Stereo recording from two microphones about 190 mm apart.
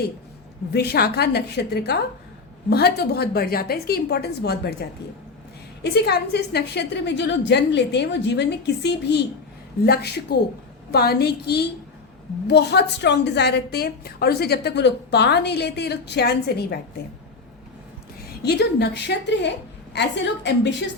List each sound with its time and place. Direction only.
0.7 s a woman's voice: 60° left (ahead or behind)
18.4 s a woman's voice: 60° left (ahead or behind)